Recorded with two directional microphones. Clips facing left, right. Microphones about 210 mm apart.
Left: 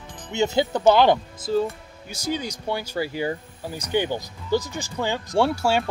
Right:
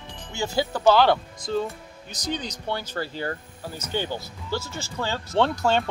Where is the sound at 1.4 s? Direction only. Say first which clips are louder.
Left 4 dB; 5° left (ahead or behind).